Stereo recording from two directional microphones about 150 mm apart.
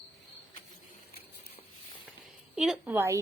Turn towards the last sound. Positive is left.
turn(degrees=-15)  # may be behind; listen again after turning